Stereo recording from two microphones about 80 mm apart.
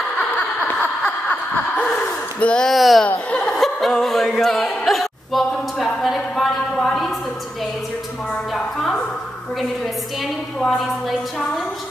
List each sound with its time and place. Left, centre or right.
0.7 s a sound: centre
2.4 s speech: centre
3.1 s speech: centre
8.5 s speech: centre
10.6 s speech: centre